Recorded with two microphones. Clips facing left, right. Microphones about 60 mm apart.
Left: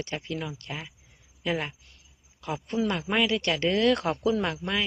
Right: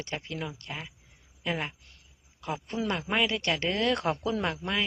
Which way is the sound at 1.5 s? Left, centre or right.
Centre.